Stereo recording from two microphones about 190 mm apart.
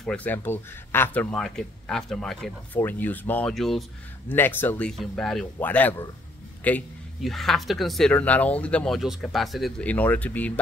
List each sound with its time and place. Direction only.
0.0 s speech: 5° left (ahead or behind)